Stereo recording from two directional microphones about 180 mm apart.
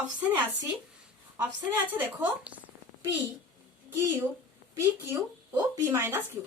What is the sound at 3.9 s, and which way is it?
Speech, 15° right (ahead or behind).